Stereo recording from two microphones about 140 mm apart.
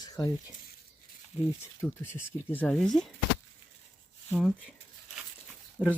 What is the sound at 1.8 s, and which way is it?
Speech, 10° left (ahead or behind).